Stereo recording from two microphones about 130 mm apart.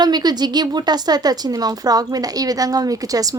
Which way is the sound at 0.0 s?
30° right (ahead or behind).